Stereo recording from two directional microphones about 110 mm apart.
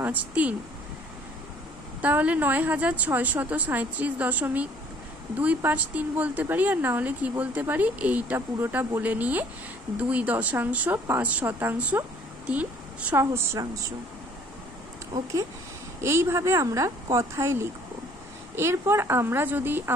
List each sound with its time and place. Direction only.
0.0 s a woman's voice: 15° right (ahead or behind)
2.0 s a woman's voice: 15° right (ahead or behind)
13.1 s speech: 25° right (ahead or behind)
16.0 s speech: 25° right (ahead or behind)